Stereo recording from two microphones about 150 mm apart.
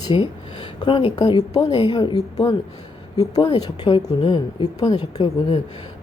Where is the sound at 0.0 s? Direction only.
30° left (ahead or behind).